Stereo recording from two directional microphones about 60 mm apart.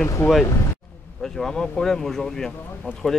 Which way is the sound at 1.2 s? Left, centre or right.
Centre.